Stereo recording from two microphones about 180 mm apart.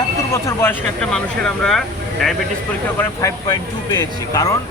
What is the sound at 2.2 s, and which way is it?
Speech, 5° left (ahead or behind).